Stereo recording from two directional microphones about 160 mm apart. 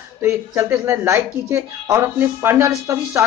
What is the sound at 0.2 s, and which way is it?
Speech, 15° right (ahead or behind).